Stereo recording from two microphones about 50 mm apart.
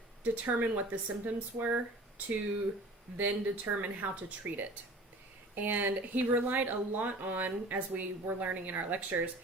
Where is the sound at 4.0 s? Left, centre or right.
Right.